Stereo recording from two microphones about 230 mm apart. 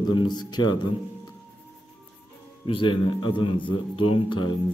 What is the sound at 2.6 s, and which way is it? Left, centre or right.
A man's voice, left.